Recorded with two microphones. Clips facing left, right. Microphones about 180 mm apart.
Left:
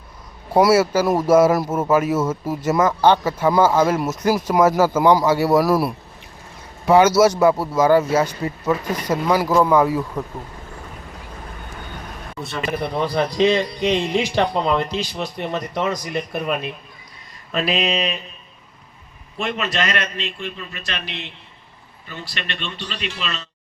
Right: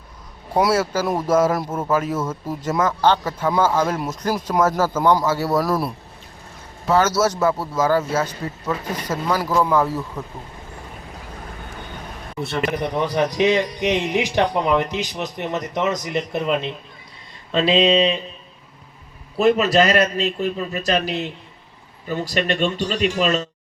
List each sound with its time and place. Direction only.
0.5 s a man's voice: 10° left (ahead or behind)
12.7 s speech: 15° right (ahead or behind)
19.4 s a man's voice: 40° right (ahead or behind)